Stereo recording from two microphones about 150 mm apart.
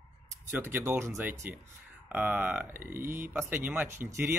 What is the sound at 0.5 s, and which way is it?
Speech, 15° right (ahead or behind).